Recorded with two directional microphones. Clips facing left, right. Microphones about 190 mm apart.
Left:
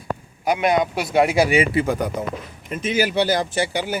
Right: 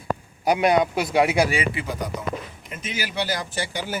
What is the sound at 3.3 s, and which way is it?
Speech, 20° left (ahead or behind).